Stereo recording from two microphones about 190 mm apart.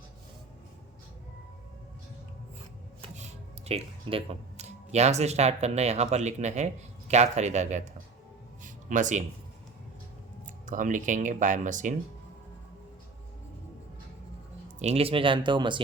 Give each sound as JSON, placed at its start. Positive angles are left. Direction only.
{"t": 3.7, "sound": "speech", "side_deg": -30}
{"t": 8.6, "sound": "music", "side_deg": -40}
{"t": 10.4, "sound": "speech", "side_deg": -40}
{"t": 14.8, "sound": "speech", "side_deg": -35}